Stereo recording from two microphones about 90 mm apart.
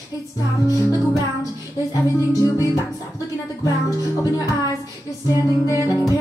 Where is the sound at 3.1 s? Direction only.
40° left (ahead or behind).